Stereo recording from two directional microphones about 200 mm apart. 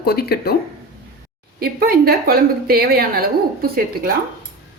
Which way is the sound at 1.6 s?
50° right (ahead or behind).